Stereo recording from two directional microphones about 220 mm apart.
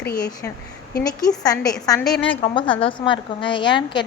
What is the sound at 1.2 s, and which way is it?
A woman's voice, 15° left (ahead or behind).